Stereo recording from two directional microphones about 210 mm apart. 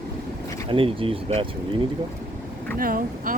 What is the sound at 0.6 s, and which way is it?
Speech, 25° right (ahead or behind).